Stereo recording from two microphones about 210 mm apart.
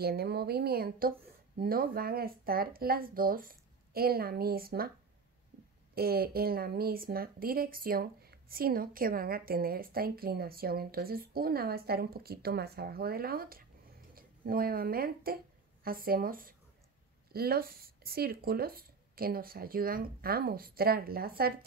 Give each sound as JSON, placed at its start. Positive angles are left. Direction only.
{"t": 0.0, "sound": "speech", "side_deg": -50}
{"t": 5.9, "sound": "speech", "side_deg": -45}